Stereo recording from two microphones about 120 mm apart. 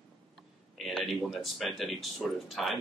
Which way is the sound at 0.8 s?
Centre (ahead or behind).